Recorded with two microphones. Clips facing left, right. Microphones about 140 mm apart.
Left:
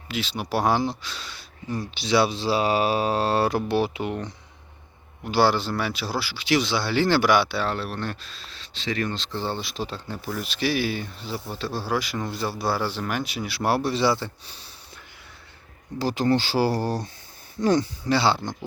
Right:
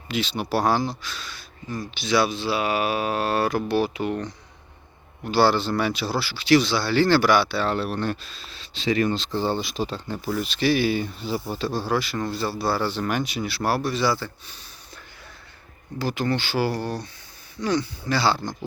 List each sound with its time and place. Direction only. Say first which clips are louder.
0.1 s speech: right 2 dB; 5° left (ahead or behind)
0.6 s speech: left 2 dB; 20° left (ahead or behind)
7.7 s speech: right 4 dB; centre (ahead or behind); by 14.6 s 30° left (ahead or behind)
16.0 s speech: left 3 dB; 35° left (ahead or behind)
18.1 s speech: left 1 dB; 20° left (ahead or behind)